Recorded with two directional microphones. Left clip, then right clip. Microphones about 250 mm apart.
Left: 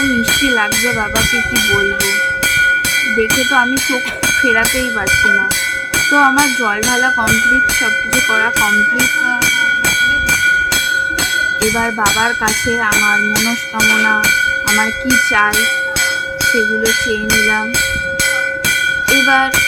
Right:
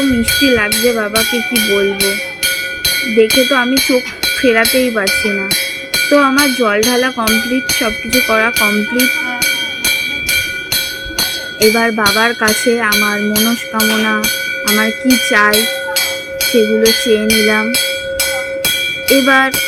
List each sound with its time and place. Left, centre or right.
3.2 s speech: centre
6.1 s speech: centre
19.2 s speech: centre